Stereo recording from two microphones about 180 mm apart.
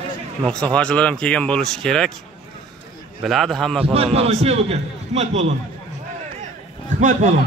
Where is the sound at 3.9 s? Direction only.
35° right (ahead or behind).